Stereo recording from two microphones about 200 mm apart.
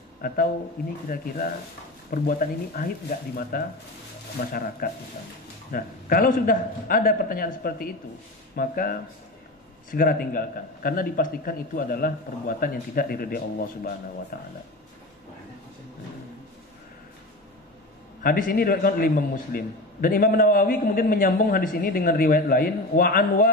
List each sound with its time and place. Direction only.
0.2 s a man's voice: 45° left (ahead or behind)
18.2 s a man's voice: 45° left (ahead or behind)